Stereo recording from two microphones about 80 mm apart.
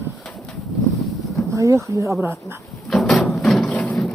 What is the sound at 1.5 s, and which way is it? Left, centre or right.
Speech, right.